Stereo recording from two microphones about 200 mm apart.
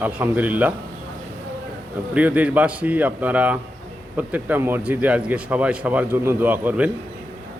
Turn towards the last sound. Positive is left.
turn(degrees=-10)  # may be behind; listen again after turning